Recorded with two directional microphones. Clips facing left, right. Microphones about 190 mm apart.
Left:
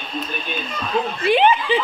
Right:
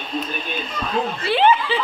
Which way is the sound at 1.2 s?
15° left (ahead or behind).